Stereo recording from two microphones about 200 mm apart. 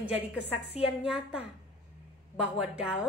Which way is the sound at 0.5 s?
30° left (ahead or behind).